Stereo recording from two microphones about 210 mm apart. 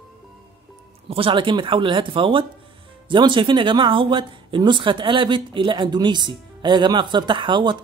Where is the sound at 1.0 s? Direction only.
25° right (ahead or behind).